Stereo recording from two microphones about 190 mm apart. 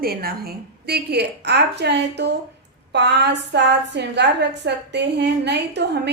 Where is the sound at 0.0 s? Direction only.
50° right (ahead or behind).